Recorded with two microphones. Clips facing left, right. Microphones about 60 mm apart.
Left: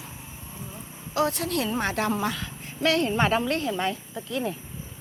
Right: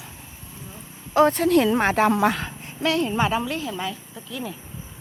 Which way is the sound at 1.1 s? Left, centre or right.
Right.